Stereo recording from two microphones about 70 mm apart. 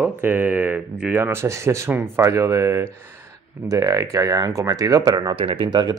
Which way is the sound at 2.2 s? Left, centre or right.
Right.